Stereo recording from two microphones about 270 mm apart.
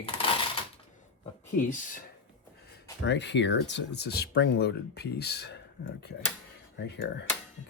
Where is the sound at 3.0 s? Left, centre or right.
Left.